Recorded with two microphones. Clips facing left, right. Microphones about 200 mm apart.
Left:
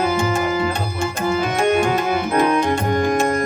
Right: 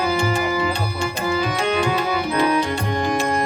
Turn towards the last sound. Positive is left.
turn(degrees=50)  # may be behind; listen again after turning